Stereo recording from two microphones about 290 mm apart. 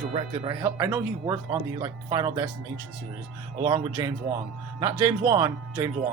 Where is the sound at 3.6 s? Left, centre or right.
Centre.